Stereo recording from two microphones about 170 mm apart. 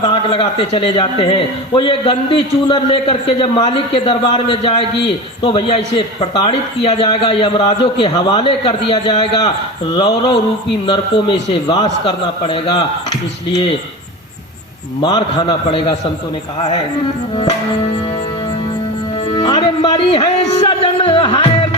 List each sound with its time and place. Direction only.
0.0 s a man's voice: 30° left (ahead or behind)
15.0 s a man's voice: 25° left (ahead or behind)
19.3 s speech: 25° left (ahead or behind)